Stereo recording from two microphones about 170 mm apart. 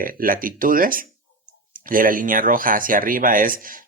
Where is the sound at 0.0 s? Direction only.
55° right (ahead or behind).